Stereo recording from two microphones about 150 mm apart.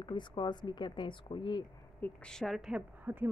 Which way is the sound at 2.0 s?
5° left (ahead or behind).